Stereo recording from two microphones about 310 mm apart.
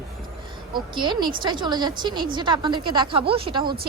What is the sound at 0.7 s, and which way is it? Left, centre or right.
A woman's voice, centre.